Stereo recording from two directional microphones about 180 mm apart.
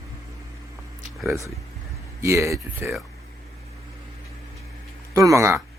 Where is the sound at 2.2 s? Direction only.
15° right (ahead or behind).